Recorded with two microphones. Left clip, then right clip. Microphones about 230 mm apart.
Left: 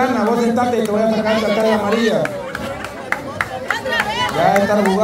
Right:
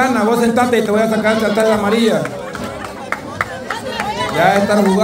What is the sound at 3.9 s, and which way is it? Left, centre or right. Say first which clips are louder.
Run: left 2 dB; left.